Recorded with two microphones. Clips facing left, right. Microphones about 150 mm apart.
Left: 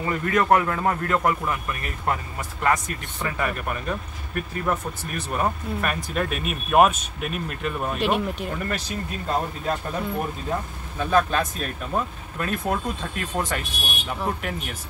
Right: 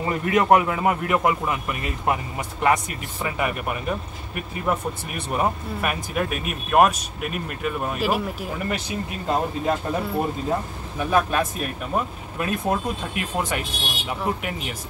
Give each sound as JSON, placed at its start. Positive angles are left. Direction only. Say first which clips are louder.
{"t": 0.0, "sound": "speech", "louder": "right 2 dB", "side_deg": -20}
{"t": 8.6, "sound": "speech", "louder": "right 2 dB", "side_deg": -15}